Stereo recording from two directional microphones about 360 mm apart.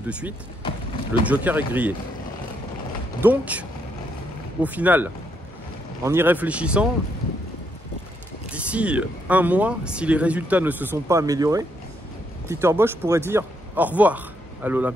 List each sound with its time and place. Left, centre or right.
0.6 s clip-clop: centre
1.2 s speech: centre
3.2 s speech: centre
8.5 s speech: centre